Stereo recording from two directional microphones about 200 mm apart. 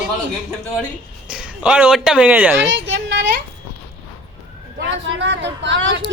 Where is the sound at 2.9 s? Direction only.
65° right (ahead or behind).